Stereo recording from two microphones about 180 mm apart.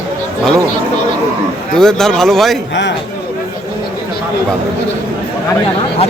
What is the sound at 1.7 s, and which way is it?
Speech, 5° left (ahead or behind).